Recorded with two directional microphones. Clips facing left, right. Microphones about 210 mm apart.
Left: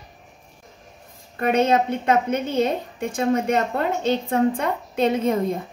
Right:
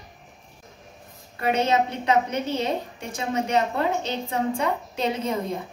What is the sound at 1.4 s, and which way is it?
A woman's voice, 50° left (ahead or behind).